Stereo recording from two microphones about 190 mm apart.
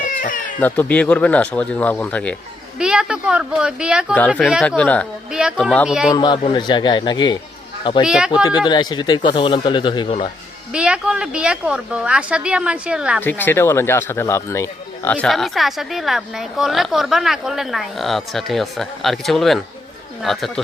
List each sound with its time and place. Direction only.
0.0 s baby cry: 45° left (ahead or behind)
0.6 s speech: 10° left (ahead or behind)
2.7 s speech: 5° right (ahead or behind)
6.1 s speech: 25° left (ahead or behind)
8.0 s speech: 5° right (ahead or behind)
8.4 s speech: 25° left (ahead or behind)
10.7 s speech: 5° right (ahead or behind)
13.2 s speech: 10° left (ahead or behind)